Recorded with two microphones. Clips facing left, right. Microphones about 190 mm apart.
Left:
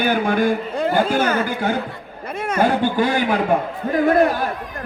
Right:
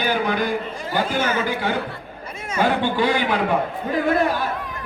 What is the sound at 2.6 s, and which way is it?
Speech, 45° left (ahead or behind).